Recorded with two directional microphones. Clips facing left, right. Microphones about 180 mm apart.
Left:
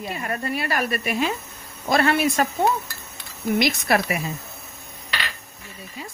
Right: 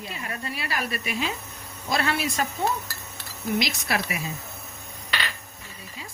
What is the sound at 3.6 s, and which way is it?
Speech, 55° left (ahead or behind).